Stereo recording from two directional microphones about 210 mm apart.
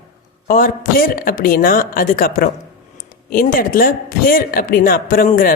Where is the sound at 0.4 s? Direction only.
40° left (ahead or behind).